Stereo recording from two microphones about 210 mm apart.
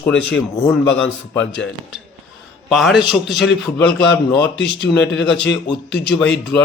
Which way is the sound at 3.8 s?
55° left (ahead or behind).